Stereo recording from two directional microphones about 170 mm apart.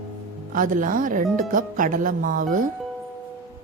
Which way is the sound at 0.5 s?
50° right (ahead or behind).